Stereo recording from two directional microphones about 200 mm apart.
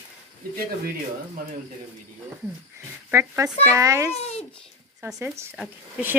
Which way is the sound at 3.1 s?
15° right (ahead or behind).